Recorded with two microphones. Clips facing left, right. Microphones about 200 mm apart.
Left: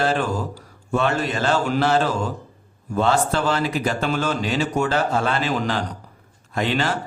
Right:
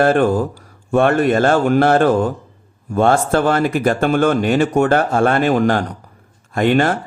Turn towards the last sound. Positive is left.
turn(degrees=-55)  # may be behind; listen again after turning